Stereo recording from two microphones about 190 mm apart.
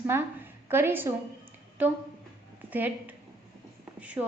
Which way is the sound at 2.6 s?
10° right (ahead or behind).